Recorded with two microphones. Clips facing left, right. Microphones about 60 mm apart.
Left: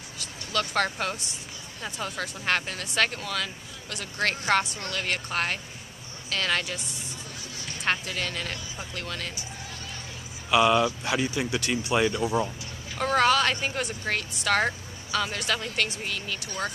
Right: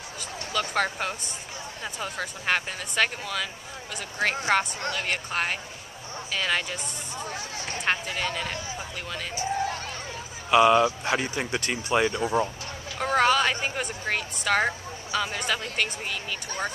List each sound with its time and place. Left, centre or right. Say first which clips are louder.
0.2 s speech: even; centre
7.8 s speech: right 1 dB; centre
10.5 s speech: right 3 dB; centre; by 11.7 s right
11.7 s speech: right 1 dB; right
13.0 s speech: even; centre